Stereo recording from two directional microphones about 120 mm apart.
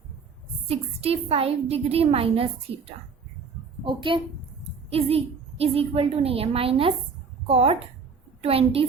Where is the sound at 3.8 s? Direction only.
45° right (ahead or behind).